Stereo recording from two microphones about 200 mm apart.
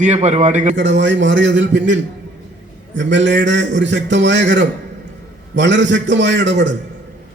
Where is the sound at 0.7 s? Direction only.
65° right (ahead or behind).